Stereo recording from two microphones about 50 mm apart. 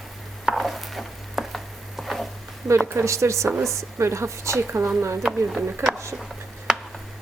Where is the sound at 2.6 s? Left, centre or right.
Right.